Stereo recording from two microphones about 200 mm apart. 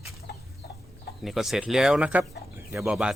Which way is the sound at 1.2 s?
Centre (ahead or behind).